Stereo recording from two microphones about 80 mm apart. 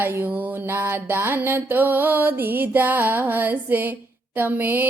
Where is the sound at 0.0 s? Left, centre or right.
Right.